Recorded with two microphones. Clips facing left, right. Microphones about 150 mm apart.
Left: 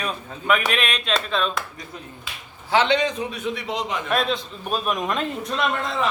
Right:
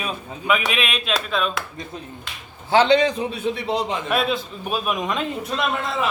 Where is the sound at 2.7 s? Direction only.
30° right (ahead or behind).